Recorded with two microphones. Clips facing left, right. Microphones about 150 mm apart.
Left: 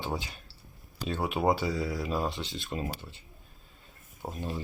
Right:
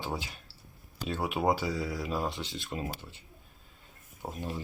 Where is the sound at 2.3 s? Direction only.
20° left (ahead or behind).